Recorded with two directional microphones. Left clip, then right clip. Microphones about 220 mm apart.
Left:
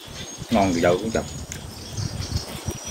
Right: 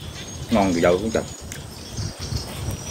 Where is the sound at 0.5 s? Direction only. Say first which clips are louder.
Right 1 dB; centre (ahead or behind).